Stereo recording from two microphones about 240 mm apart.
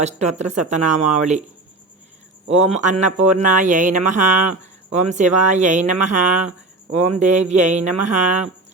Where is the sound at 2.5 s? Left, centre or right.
Right.